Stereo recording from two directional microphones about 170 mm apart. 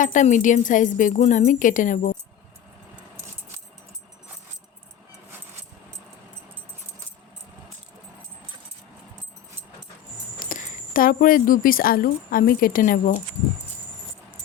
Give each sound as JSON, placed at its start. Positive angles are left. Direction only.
{"t": 0.0, "sound": "a woman's voice", "side_deg": 50}
{"t": 10.4, "sound": "a woman's voice", "side_deg": 55}